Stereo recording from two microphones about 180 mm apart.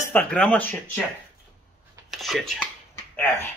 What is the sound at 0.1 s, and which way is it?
Speech, 5° left (ahead or behind).